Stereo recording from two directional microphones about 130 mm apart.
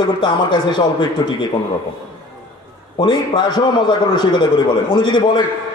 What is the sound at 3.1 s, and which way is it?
A man's voice, 35° left (ahead or behind).